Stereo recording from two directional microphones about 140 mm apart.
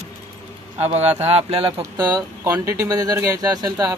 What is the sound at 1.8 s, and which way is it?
Speech, 30° right (ahead or behind).